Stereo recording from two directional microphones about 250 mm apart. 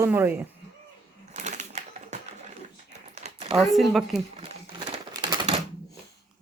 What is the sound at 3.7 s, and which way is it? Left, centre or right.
Speech, centre.